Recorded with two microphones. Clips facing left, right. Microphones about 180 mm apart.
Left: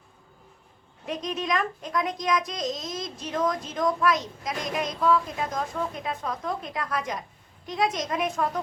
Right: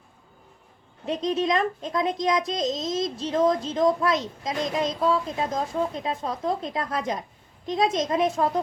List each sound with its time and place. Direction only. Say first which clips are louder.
1.0 s a child's voice: right 6 dB; 25° right (ahead or behind)